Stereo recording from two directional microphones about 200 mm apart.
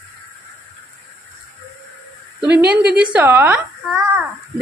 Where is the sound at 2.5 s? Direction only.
50° right (ahead or behind).